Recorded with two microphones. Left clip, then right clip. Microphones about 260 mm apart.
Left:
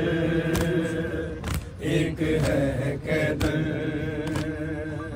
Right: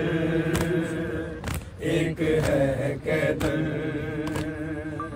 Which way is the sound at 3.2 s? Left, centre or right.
Centre.